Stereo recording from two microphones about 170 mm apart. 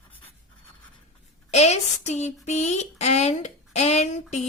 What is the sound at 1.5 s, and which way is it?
A woman's voice, 40° left (ahead or behind).